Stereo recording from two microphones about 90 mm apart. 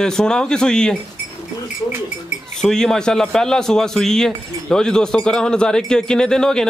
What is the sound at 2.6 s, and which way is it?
Speech, 5° left (ahead or behind).